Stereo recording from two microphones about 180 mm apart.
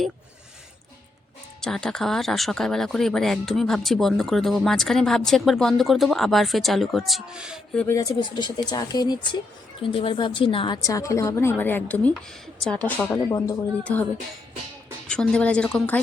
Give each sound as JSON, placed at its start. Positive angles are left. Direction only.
{"t": 1.6, "sound": "speech", "side_deg": 5}
{"t": 7.8, "sound": "a woman's voice", "side_deg": 15}